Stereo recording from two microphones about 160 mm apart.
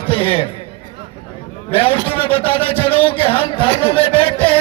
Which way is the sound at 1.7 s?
35° left (ahead or behind).